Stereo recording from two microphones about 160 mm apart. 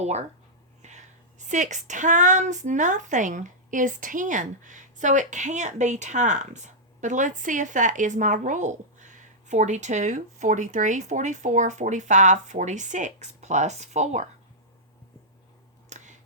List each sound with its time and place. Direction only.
0.0 s a woman's voice: 45° right (ahead or behind)
0.8 s whispering: 45° right (ahead or behind)
1.5 s a woman's voice: 50° right (ahead or behind)
15.9 s a sound: 50° right (ahead or behind)